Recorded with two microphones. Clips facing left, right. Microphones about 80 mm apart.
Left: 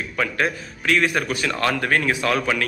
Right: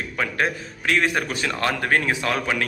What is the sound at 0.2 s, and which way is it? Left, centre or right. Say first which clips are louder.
A man's voice: left 1 dB; right.